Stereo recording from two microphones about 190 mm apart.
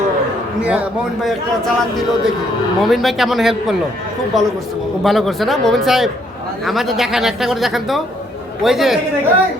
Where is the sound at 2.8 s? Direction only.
Centre (ahead or behind).